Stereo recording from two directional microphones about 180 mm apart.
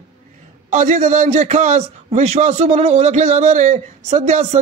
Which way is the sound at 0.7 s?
40° right (ahead or behind).